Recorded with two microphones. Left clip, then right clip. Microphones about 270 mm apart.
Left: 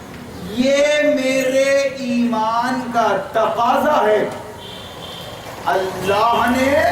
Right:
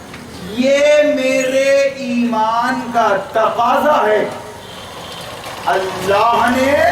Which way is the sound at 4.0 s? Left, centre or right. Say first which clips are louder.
Right 1 dB; centre.